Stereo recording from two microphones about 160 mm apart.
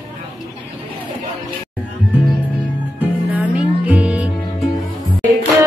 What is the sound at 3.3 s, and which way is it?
Music, 10° right (ahead or behind).